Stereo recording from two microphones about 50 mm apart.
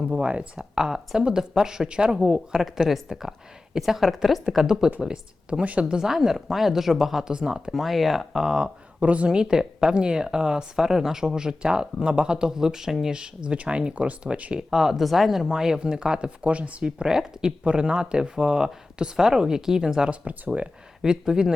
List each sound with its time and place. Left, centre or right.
0.1 s speech: right
0.5 s speech: centre
2.5 s speech: centre
4.5 s speech: centre
7.7 s speech: centre
9.0 s speech: right
9.3 s speech: centre
13.1 s speech: centre
14.7 s speech: centre
20.1 s speech: right
21.0 s speech: centre